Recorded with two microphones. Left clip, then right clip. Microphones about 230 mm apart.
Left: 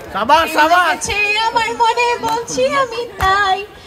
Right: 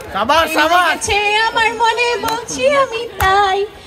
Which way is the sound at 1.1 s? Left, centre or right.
Left.